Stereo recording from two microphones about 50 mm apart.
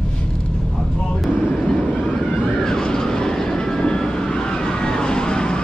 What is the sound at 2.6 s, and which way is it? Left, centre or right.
Vehicle, centre.